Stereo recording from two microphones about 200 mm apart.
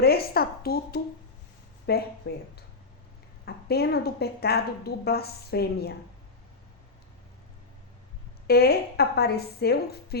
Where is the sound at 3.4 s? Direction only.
55° left (ahead or behind).